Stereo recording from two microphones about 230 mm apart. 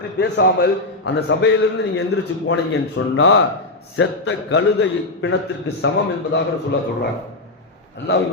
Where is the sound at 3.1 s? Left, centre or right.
Left.